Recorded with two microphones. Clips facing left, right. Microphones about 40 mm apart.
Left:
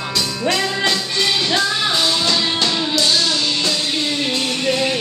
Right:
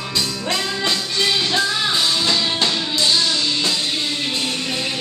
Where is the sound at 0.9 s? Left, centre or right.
Centre.